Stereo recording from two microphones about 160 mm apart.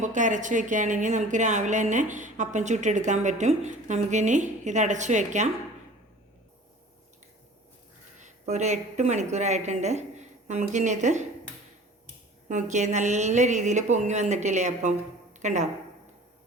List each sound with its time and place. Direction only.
0.0 s speech: 50° right (ahead or behind)
8.2 s a woman's voice: 45° right (ahead or behind)
12.5 s speech: 50° right (ahead or behind)